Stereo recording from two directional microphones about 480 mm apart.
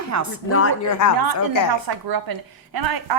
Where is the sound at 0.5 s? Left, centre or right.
Left.